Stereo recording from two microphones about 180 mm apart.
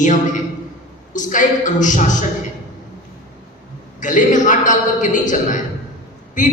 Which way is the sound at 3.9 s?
45° left (ahead or behind).